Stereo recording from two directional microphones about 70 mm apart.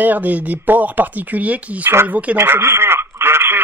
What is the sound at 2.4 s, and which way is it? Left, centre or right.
Radio, right.